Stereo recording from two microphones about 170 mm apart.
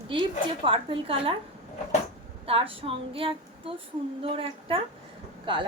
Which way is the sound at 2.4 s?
30° right (ahead or behind).